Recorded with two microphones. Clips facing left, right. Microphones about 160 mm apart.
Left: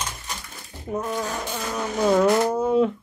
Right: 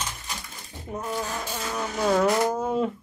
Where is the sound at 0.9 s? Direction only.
20° left (ahead or behind).